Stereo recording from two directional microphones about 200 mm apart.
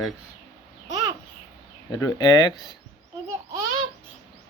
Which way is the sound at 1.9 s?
20° left (ahead or behind).